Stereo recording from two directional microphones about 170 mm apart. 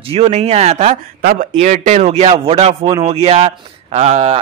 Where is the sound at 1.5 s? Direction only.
45° right (ahead or behind).